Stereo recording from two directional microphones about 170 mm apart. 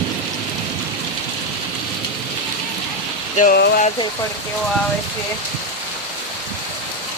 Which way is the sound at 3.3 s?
50° left (ahead or behind).